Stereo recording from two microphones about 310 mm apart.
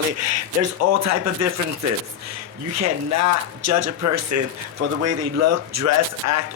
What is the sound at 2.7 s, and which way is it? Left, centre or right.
A man's voice, right.